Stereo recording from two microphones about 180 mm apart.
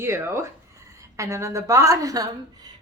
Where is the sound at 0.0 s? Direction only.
15° right (ahead or behind).